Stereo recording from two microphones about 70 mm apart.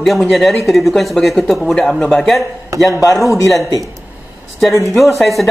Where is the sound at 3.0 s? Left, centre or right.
Left.